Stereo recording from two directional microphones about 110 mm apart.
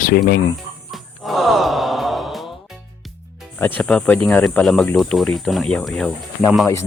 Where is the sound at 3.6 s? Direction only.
15° left (ahead or behind).